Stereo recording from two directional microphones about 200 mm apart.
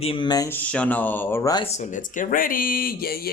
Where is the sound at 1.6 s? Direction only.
35° left (ahead or behind).